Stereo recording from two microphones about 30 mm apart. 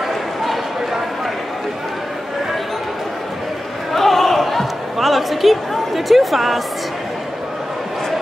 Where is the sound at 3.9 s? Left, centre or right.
Centre.